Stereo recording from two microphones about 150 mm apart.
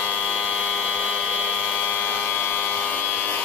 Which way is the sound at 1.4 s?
10° left (ahead or behind).